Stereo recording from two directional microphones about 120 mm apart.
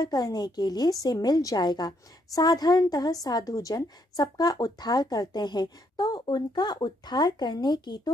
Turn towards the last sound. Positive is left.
turn(degrees=35)  # may be behind; listen again after turning